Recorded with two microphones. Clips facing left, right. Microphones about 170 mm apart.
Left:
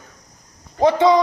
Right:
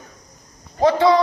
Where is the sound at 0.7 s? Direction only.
20° left (ahead or behind).